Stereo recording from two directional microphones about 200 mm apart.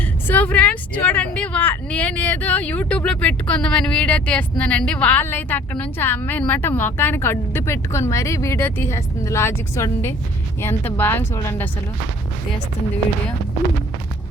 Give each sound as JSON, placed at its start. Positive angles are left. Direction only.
{"t": 0.3, "sound": "speech", "side_deg": 10}